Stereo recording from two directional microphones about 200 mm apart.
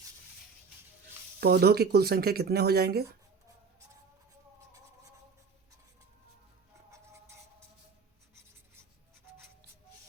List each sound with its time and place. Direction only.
1.4 s speech: 50° right (ahead or behind)